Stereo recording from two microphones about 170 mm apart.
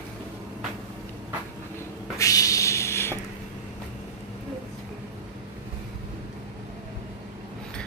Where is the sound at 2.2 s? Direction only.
20° left (ahead or behind).